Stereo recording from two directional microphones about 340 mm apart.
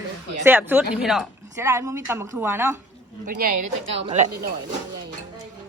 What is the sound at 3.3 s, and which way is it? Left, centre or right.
Speech, right.